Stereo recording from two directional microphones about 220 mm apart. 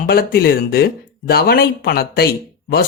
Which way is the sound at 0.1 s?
45° left (ahead or behind).